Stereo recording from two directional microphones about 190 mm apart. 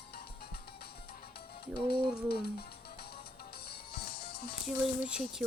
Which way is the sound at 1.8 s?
55° left (ahead or behind).